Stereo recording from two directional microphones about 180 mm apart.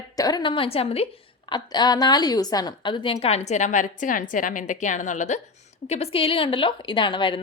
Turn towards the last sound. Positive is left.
turn(degrees=25)  # may be behind; listen again after turning